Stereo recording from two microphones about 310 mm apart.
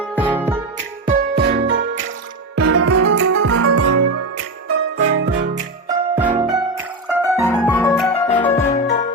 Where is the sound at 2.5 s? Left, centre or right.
Right.